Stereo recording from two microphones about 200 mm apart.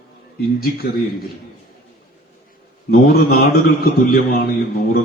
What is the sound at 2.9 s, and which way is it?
A man's voice, 50° left (ahead or behind).